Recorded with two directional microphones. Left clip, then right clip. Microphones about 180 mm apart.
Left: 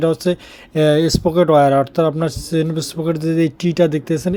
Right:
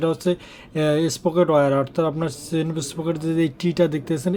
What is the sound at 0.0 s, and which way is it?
Speech, 25° left (ahead or behind).